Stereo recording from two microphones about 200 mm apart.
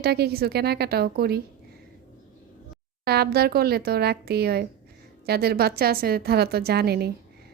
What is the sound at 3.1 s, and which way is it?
Speech, 50° right (ahead or behind).